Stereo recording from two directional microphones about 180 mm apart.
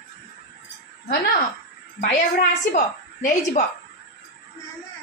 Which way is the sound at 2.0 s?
45° left (ahead or behind).